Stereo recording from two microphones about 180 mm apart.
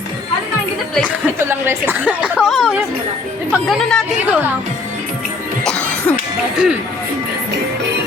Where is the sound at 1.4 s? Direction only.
15° right (ahead or behind).